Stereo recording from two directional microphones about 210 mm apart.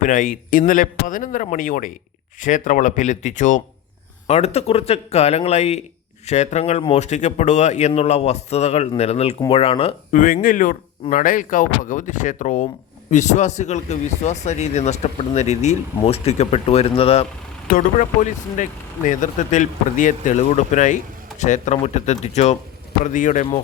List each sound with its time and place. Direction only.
0.0 s speech: 40° left (ahead or behind)
17.7 s speech: 40° left (ahead or behind)